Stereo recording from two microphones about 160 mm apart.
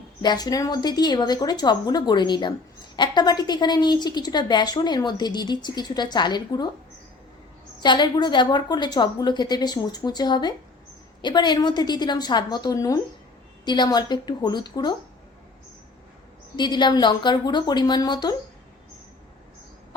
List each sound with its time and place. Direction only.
0.2 s a woman's voice: 25° left (ahead or behind)
7.8 s a woman's voice: 25° left (ahead or behind)
16.6 s a woman's voice: 30° left (ahead or behind)